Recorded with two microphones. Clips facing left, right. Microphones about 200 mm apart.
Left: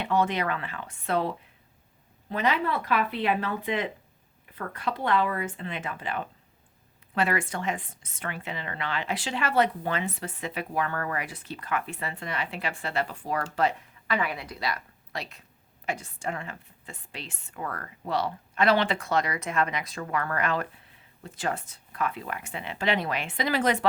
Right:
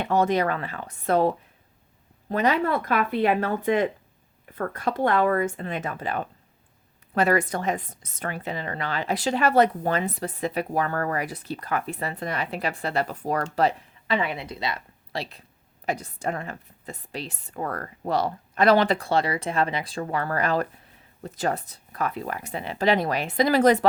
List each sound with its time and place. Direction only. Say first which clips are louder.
0.0 s a woman's voice: right 4 dB; 40° right (ahead or behind)
2.3 s a woman's voice: right 4 dB; 45° right (ahead or behind)